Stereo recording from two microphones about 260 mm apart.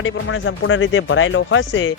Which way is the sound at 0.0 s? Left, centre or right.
Left.